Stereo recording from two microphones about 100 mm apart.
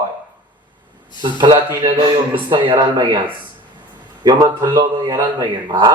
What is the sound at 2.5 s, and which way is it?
Speech, 55° right (ahead or behind).